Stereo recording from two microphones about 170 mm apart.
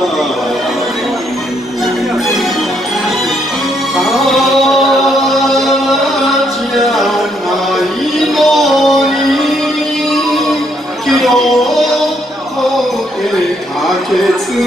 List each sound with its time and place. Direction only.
3.9 s music: centre (ahead or behind)